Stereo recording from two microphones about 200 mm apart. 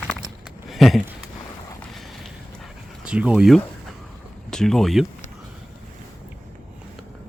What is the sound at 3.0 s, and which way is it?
Speech, 5° right (ahead or behind).